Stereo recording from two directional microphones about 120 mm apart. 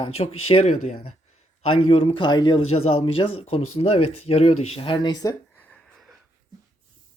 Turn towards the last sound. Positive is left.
turn(degrees=35)  # may be behind; listen again after turning